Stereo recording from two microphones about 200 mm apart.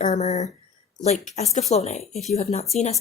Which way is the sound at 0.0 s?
35° left (ahead or behind).